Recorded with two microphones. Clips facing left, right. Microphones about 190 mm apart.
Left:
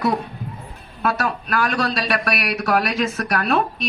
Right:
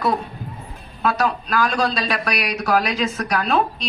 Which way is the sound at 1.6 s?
65° left (ahead or behind).